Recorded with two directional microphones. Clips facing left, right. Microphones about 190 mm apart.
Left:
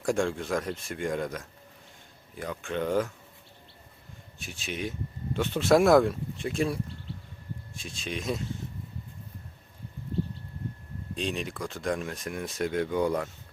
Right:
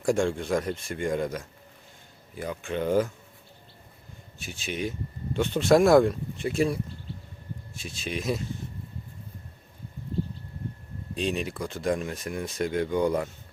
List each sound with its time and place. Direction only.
0.0 s speech: centre (ahead or behind)
4.4 s speech: centre (ahead or behind)
11.1 s speech: centre (ahead or behind)